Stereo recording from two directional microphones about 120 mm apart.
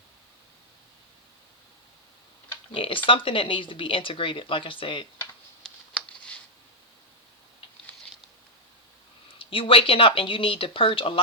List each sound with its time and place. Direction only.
2.7 s speech: 45° left (ahead or behind)
5.6 s a sound: 10° left (ahead or behind)
9.4 s speech: 50° left (ahead or behind)